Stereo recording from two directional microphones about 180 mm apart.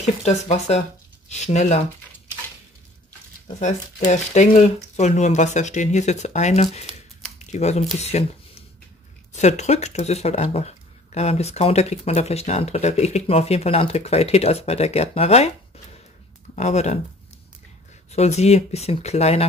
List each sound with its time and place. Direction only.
0.0 s speech: 35° left (ahead or behind)
3.5 s speech: 40° left (ahead or behind)
9.3 s speech: 40° left (ahead or behind)
16.5 s speech: 40° left (ahead or behind)
18.1 s speech: 35° left (ahead or behind)